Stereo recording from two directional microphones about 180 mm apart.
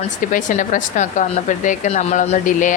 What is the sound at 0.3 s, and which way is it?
Speech, 45° left (ahead or behind).